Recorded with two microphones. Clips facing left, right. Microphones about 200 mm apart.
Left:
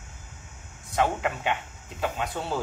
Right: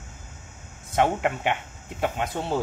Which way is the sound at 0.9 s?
25° right (ahead or behind).